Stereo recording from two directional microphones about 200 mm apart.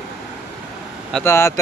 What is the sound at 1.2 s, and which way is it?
Speech, 15° left (ahead or behind).